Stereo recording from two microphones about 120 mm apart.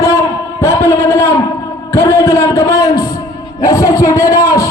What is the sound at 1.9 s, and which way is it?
A man's voice, 20° left (ahead or behind).